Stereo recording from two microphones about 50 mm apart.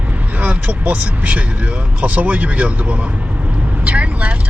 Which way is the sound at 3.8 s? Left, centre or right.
Right.